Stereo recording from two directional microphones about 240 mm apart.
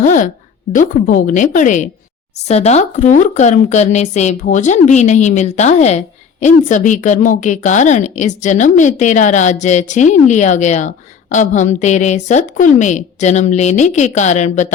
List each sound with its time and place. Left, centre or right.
0.0 s a woman's voice: left